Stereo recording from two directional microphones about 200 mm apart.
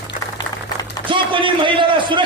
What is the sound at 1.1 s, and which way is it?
Speech, 25° right (ahead or behind).